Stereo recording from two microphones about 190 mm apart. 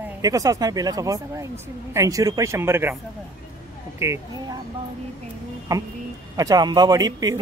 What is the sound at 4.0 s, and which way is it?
Speech, 15° right (ahead or behind).